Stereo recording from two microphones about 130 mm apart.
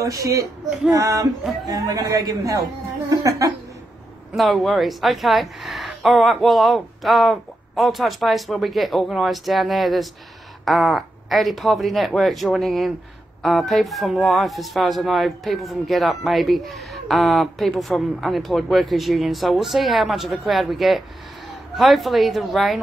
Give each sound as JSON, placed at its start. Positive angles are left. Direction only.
{"t": 0.0, "sound": "speech", "side_deg": -25}
{"t": 4.3, "sound": "speech", "side_deg": 0}